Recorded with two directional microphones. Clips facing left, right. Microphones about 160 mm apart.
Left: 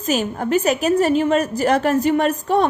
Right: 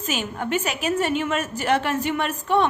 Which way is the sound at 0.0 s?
40° left (ahead or behind).